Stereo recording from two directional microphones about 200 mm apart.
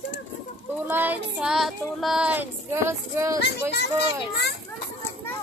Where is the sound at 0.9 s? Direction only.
10° right (ahead or behind).